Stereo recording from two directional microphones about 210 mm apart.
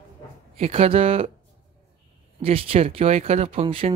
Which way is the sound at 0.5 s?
30° right (ahead or behind).